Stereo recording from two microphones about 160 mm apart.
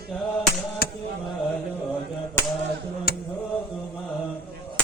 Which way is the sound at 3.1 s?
70° left (ahead or behind).